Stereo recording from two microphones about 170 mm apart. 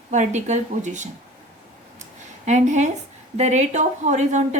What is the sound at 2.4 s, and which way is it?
A woman's voice, 45° right (ahead or behind).